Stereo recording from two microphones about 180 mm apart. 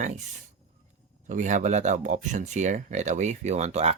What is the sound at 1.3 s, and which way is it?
Speech, 45° right (ahead or behind).